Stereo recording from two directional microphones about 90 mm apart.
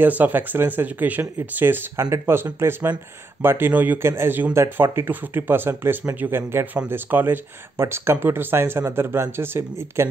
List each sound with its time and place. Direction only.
0.0 s speech: 20° right (ahead or behind)